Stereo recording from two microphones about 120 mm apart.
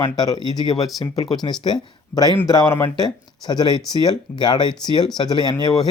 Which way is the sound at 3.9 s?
35° left (ahead or behind).